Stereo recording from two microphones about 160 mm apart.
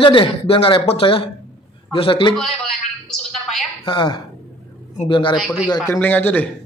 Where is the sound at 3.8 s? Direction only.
30° left (ahead or behind).